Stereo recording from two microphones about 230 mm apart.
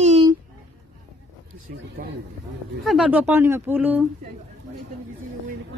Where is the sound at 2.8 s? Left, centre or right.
Centre.